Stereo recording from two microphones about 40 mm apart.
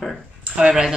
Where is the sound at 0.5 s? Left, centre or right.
Centre.